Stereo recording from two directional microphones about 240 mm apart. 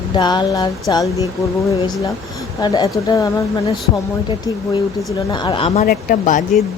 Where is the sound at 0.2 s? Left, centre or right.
Centre.